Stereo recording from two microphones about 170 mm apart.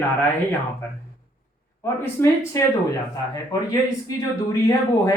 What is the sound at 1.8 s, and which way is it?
Speech, 15° left (ahead or behind).